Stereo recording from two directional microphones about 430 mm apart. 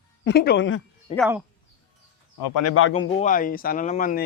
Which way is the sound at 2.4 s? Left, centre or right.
Left.